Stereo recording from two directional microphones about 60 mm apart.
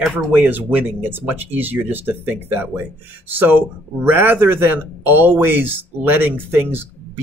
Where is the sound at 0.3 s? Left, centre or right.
Right.